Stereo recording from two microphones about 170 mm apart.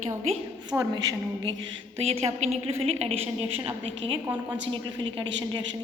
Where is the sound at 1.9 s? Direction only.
35° right (ahead or behind).